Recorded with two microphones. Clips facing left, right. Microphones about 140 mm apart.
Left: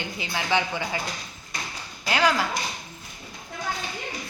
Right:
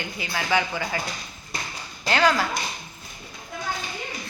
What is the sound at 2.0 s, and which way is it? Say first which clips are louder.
Speech: right 2 dB; 10° left (ahead or behind).